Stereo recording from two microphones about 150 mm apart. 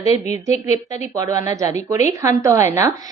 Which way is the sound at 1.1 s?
25° right (ahead or behind).